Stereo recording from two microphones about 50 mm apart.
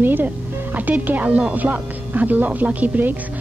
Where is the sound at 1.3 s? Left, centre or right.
Right.